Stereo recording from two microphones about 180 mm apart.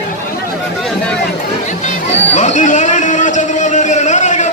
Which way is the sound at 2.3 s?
40° left (ahead or behind).